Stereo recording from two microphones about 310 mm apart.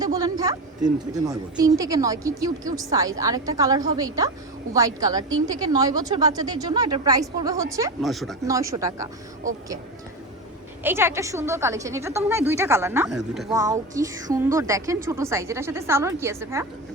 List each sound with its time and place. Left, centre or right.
0.0 s speech: centre
8.0 s speech: centre
8.4 s speech: centre
10.8 s speech: centre
13.5 s speech: centre